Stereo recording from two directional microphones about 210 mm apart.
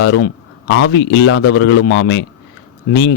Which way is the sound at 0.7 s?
55° left (ahead or behind).